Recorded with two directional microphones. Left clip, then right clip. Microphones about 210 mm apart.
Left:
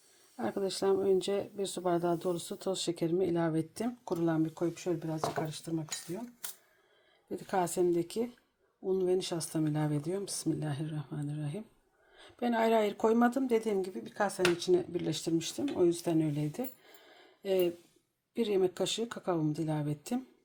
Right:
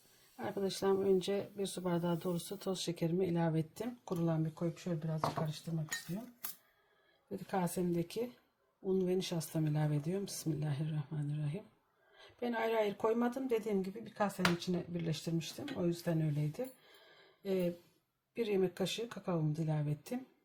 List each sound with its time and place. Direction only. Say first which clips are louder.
0.3 s speech: left 4 dB; 30° left (ahead or behind); by 5.9 s 50° left (ahead or behind)
7.3 s speech: left 6 dB; 40° left (ahead or behind)